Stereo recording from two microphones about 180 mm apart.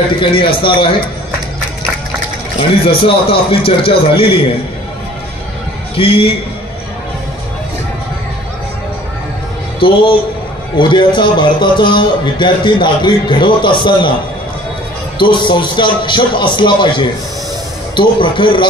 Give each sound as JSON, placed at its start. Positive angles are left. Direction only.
{"t": 0.1, "sound": "a man's voice", "side_deg": 30}
{"t": 3.0, "sound": "speech", "side_deg": 30}
{"t": 5.9, "sound": "speech", "side_deg": 30}
{"t": 9.8, "sound": "a man's voice", "side_deg": 30}
{"t": 15.1, "sound": "a man's voice", "side_deg": 25}